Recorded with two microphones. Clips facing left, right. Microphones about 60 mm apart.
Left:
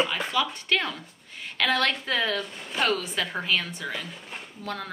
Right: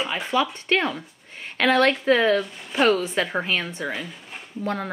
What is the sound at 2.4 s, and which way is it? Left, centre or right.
Speech, centre.